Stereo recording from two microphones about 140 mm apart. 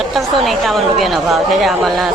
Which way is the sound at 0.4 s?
Centre (ahead or behind).